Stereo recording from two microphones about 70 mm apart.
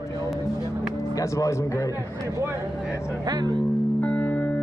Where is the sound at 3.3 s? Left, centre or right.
Right.